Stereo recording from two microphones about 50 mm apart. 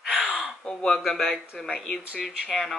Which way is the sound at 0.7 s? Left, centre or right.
Centre.